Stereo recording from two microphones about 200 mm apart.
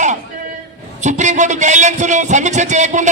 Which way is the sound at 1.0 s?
35° right (ahead or behind).